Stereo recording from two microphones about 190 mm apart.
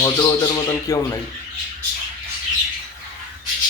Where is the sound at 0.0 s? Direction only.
20° left (ahead or behind).